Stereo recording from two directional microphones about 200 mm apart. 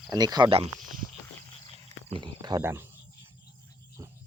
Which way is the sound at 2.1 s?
25° right (ahead or behind).